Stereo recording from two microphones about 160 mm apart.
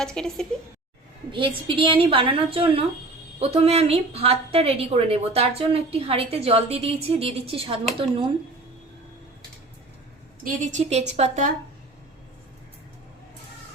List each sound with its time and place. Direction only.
0.0 s speech: 5° left (ahead or behind)
1.3 s a woman's voice: 30° right (ahead or behind)
10.4 s a woman's voice: 50° right (ahead or behind)